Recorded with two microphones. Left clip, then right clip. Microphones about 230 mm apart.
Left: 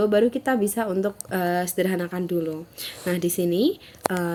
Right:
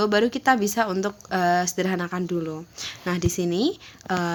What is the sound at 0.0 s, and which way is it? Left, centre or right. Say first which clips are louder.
A woman's voice: even; centre.